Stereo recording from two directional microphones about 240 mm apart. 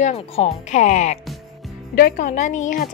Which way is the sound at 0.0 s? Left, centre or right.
Left.